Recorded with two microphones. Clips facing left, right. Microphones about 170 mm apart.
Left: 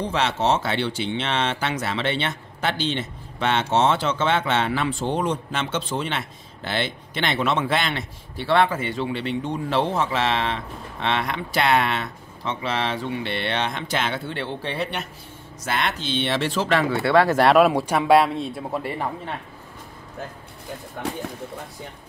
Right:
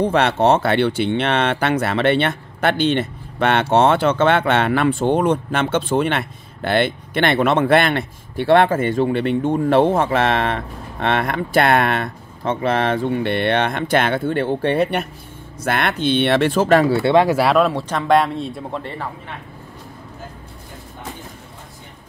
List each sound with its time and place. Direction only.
0.0 s speech: 55° right (ahead or behind)
17.0 s speech: 20° right (ahead or behind)
17.4 s speech: centre (ahead or behind)
17.6 s speech: 10° left (ahead or behind)